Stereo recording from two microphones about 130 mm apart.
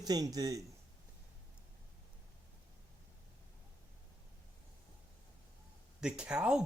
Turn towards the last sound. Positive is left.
turn(degrees=-5)  # may be behind; listen again after turning